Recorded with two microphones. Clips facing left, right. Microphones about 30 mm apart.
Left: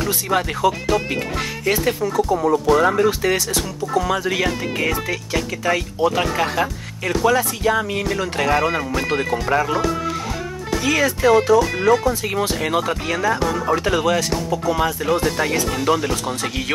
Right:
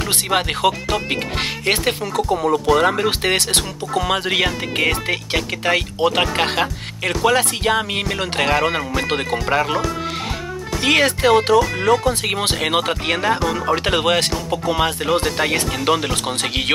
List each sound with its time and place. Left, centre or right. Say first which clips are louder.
0.3 s speech: right 1 dB; right
0.8 s speech: left 1 dB; right
1.7 s speech: left 1 dB; right
2.3 s speech: right 1 dB; right
2.8 s speech: left 1 dB; right
10.8 s speech: right 3 dB; right